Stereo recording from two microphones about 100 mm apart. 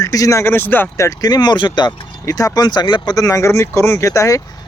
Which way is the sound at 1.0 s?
40° left (ahead or behind).